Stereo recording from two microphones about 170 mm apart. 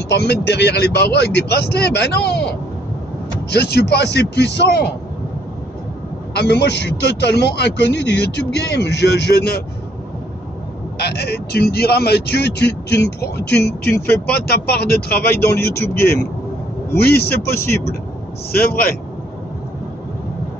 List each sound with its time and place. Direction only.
0.1 s speech: 75° left (ahead or behind)
6.3 s speech: 75° left (ahead or behind)
11.0 s speech: 70° left (ahead or behind)
16.0 s speech: 15° left (ahead or behind)
16.9 s speech: 65° left (ahead or behind)
18.5 s speech: 65° left (ahead or behind)